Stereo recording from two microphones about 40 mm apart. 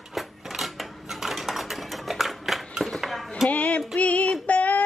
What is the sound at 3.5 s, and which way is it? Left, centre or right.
Female singing, left.